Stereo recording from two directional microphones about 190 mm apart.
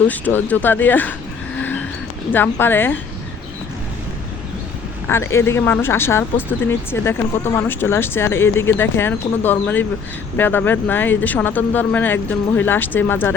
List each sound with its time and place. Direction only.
0.1 s speech: 10° left (ahead or behind)
2.3 s speech: 10° left (ahead or behind)
5.0 s speech: 15° left (ahead or behind)